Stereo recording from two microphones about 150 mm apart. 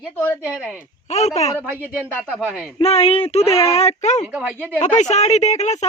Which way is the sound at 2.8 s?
40° left (ahead or behind).